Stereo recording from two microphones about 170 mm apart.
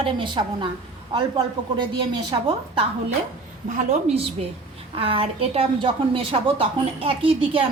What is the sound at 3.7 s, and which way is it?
A woman's voice, 40° right (ahead or behind).